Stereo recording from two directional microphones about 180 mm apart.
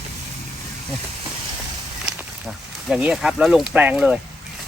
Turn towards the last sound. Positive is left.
turn(degrees=-5)  # may be behind; listen again after turning